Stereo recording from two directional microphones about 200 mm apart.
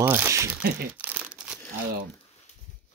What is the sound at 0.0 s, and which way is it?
Speech, 10° right (ahead or behind).